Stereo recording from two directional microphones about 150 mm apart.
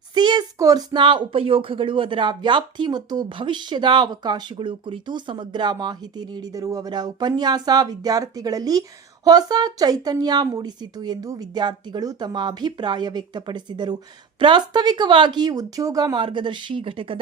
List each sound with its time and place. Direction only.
0.1 s speech: 30° right (ahead or behind)